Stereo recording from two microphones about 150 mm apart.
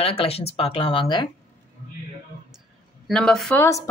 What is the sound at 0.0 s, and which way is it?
Speech, 40° left (ahead or behind).